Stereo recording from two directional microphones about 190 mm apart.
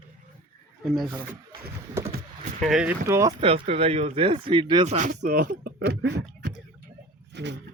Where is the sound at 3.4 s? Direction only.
30° right (ahead or behind).